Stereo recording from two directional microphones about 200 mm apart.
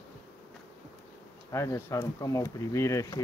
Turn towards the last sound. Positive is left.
turn(degrees=15)  # may be behind; listen again after turning